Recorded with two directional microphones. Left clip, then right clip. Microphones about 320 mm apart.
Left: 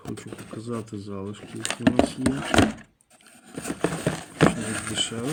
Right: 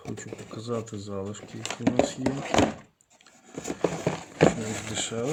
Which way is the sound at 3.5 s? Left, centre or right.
Left.